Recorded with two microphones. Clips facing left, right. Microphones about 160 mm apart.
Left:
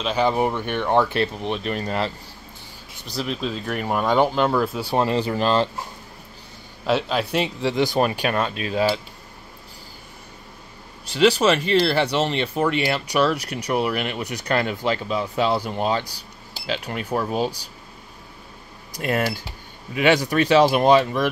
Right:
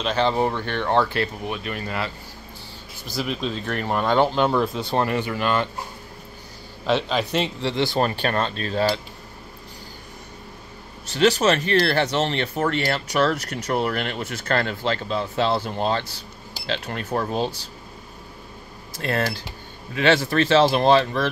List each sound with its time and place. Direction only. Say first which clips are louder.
0.0 s speech: left 1 dB; 10° left (ahead or behind); by 2.1 s 35° left (ahead or behind)
3.1 s speech: even; centre (ahead or behind)
5.0 s speech: left 3 dB; 30° left (ahead or behind)
6.9 s speech: even; 5° left (ahead or behind)
11.1 s speech: left 1 dB; 10° left (ahead or behind)
18.9 s speech: left 1 dB; 15° left (ahead or behind)